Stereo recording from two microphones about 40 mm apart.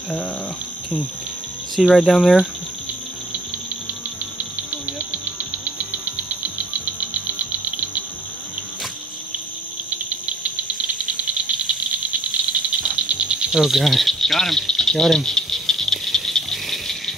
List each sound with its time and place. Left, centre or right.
1.8 s speech: centre
7.0 s music: right
9.8 s a sound: right
11.4 s rattle: right
13.5 s cricket: centre